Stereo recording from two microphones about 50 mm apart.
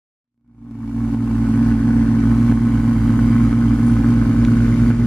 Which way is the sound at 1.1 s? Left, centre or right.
Centre.